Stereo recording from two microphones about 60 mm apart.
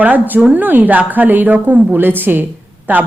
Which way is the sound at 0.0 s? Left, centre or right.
Right.